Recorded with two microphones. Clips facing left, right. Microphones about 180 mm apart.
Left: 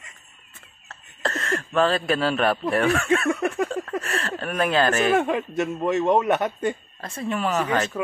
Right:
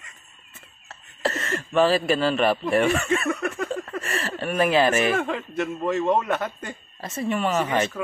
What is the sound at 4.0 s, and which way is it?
Speech, centre (ahead or behind).